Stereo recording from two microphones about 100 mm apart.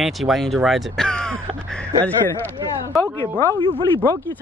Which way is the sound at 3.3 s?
30° left (ahead or behind).